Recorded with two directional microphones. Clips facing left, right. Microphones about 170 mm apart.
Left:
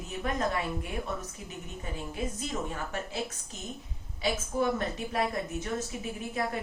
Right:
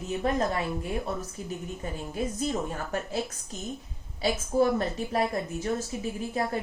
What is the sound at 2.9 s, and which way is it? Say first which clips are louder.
A woman's voice: right 4 dB; 40° right (ahead or behind).